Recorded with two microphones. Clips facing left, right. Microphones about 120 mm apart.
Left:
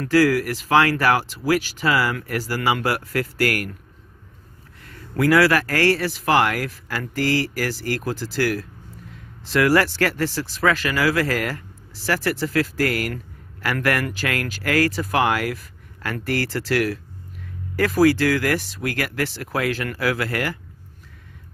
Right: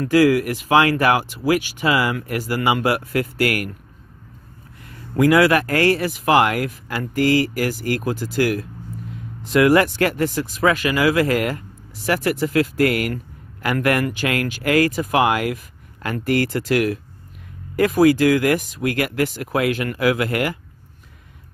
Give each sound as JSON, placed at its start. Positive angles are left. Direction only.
{"t": 0.0, "sound": "speech", "side_deg": -15}
{"t": 4.8, "sound": "a man's voice", "side_deg": -15}